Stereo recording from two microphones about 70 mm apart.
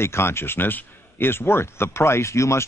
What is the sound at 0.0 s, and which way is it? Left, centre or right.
Speech, left.